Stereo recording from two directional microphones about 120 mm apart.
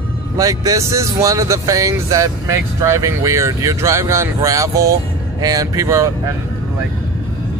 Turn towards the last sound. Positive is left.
turn(degrees=-25)  # may be behind; listen again after turning